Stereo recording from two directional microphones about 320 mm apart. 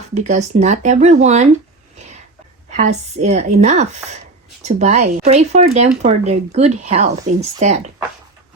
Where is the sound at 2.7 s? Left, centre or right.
Right.